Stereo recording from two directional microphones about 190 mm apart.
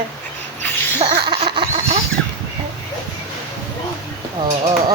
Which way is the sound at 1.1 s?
25° right (ahead or behind).